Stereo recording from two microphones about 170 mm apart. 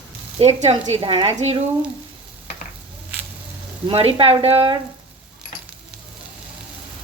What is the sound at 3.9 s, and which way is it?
Speech, 35° right (ahead or behind).